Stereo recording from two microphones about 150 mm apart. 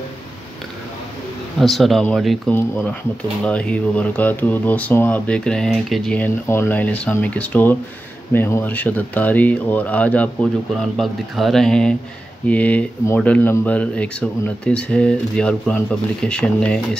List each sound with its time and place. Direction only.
1.6 s speech: centre (ahead or behind)
2.5 s speech: 15° left (ahead or behind)